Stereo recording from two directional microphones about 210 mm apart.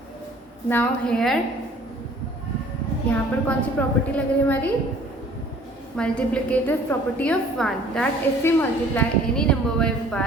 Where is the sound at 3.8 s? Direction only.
10° left (ahead or behind).